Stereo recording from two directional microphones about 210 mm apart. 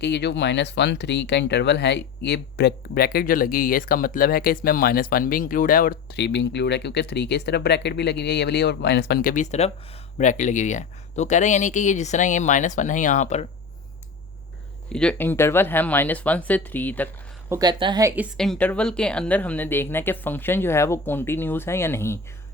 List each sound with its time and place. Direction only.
0.0 s speech: 55° left (ahead or behind); by 13.5 s 30° left (ahead or behind)
14.9 s speech: 5° left (ahead or behind)
17.5 s speech: 20° right (ahead or behind)
18.2 s speech: centre (ahead or behind)